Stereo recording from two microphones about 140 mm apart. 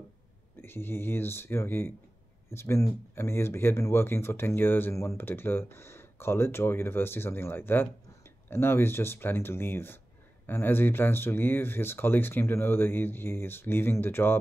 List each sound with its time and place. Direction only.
0.6 s speech: 15° left (ahead or behind)